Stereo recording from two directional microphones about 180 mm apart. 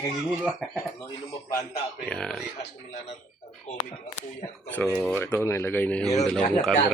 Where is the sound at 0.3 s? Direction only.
5° right (ahead or behind).